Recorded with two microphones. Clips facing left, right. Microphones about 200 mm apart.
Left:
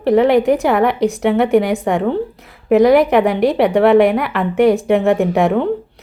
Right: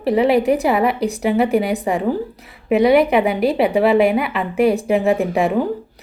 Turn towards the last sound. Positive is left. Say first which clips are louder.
# left 3 dB
turn(degrees=0)  # may be behind; listen again after turning